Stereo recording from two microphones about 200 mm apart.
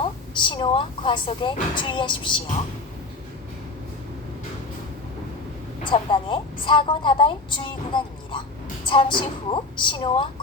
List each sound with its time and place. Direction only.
0.0 s speech: 25° left (ahead or behind)
5.8 s a woman's voice: 25° left (ahead or behind)